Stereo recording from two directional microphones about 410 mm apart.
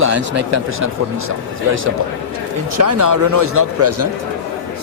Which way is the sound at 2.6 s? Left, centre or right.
Right.